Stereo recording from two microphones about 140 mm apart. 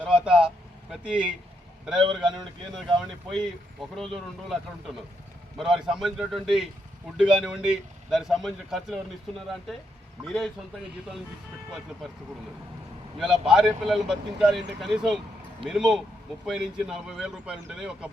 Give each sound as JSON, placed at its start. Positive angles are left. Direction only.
{"t": 0.0, "sound": "vehicle", "side_deg": -10}
{"t": 2.0, "sound": "a man's voice", "side_deg": -35}
{"t": 3.0, "sound": "speech", "side_deg": -5}
{"t": 10.2, "sound": "speech", "side_deg": 0}
{"t": 13.1, "sound": "speech", "side_deg": -5}